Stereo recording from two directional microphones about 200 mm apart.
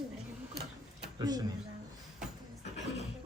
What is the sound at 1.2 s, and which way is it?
Speech, 20° right (ahead or behind).